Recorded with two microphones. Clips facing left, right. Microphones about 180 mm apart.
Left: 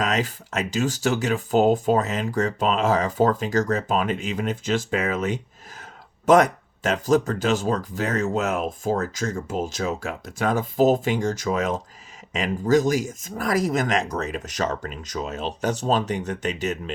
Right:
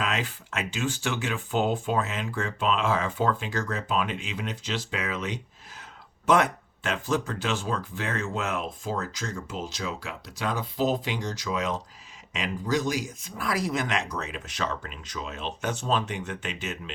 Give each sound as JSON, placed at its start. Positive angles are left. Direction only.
{"t": 0.0, "sound": "speech", "side_deg": 40}